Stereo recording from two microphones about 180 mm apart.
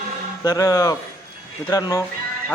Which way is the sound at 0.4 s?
20° left (ahead or behind).